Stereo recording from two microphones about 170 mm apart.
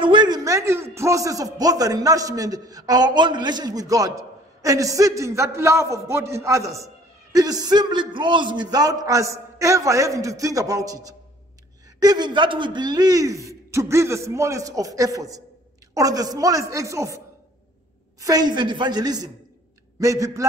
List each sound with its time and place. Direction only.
0.0 s a man's voice: 25° right (ahead or behind)
18.2 s a man's voice: 25° right (ahead or behind)